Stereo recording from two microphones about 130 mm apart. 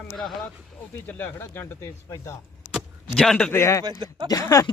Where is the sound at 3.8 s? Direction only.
35° right (ahead or behind).